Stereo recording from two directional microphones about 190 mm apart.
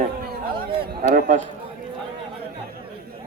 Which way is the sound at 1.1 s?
40° right (ahead or behind).